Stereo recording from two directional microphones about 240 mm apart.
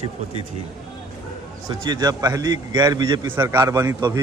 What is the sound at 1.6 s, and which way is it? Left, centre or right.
A man's voice, centre.